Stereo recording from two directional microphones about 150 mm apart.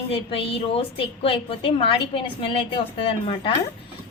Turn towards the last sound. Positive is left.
turn(degrees=35)  # may be behind; listen again after turning